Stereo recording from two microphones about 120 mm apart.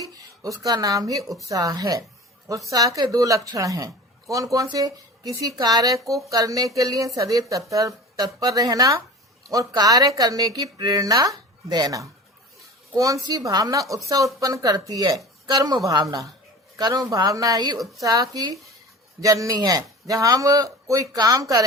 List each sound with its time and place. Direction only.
0.0 s speech: 30° right (ahead or behind)
1.2 s speech: centre (ahead or behind)
1.5 s speech: 30° right (ahead or behind)